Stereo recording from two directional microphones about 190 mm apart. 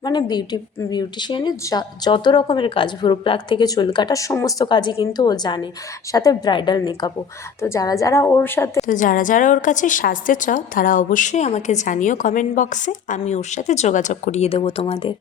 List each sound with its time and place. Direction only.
0.0 s a woman's voice: 20° left (ahead or behind)
8.9 s a woman's voice: 45° left (ahead or behind)